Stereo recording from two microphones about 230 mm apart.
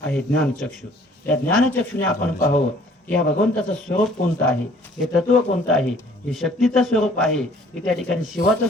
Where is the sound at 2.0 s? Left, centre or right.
Left.